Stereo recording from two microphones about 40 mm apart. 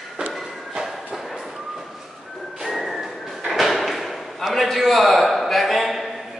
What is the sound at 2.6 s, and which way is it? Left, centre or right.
Music, centre.